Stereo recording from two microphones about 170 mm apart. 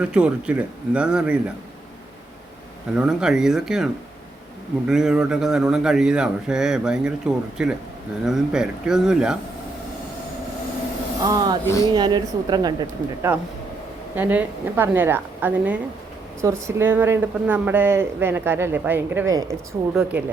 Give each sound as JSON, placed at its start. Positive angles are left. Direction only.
{"t": 0.0, "sound": "speech", "side_deg": -5}
{"t": 2.9, "sound": "a man's voice", "side_deg": -5}
{"t": 4.9, "sound": "a man's voice", "side_deg": -5}
{"t": 11.3, "sound": "a woman's voice", "side_deg": -25}
{"t": 11.6, "sound": "speech", "side_deg": 20}
{"t": 11.9, "sound": "a woman's voice", "side_deg": -25}
{"t": 13.3, "sound": "speech", "side_deg": -10}
{"t": 19.9, "sound": "speech", "side_deg": -5}